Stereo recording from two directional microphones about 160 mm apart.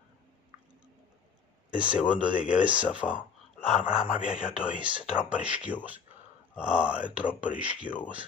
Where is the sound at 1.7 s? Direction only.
5° right (ahead or behind).